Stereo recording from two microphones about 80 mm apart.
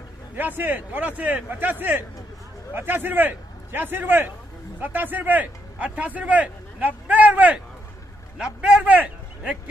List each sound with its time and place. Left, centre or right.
0.4 s a man's voice: right